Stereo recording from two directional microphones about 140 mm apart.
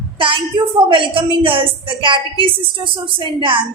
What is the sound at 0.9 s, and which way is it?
A woman's voice, 40° right (ahead or behind).